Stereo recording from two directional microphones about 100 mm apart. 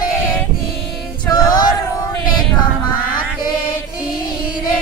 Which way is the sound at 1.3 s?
45° left (ahead or behind).